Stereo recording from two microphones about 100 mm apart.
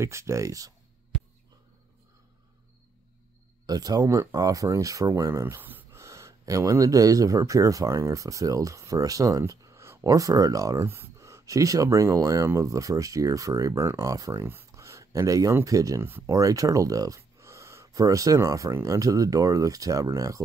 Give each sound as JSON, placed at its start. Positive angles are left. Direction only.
{"t": 0.0, "sound": "speech", "side_deg": -30}
{"t": 3.6, "sound": "speech", "side_deg": -40}
{"t": 5.9, "sound": "speech", "side_deg": -30}
{"t": 16.0, "sound": "speech", "side_deg": -25}
{"t": 16.3, "sound": "speech", "side_deg": -35}